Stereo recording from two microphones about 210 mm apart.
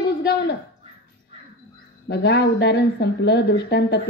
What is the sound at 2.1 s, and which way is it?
Speech, 55° left (ahead or behind).